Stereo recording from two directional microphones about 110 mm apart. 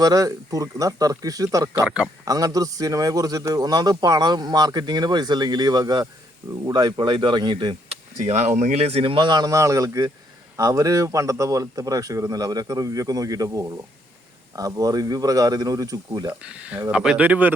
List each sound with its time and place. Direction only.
0.0 s a man's voice: 35° right (ahead or behind)
7.9 s a man's voice: 80° right; by 16.3 s 35° right (ahead or behind)
16.4 s speech: 10° right (ahead or behind)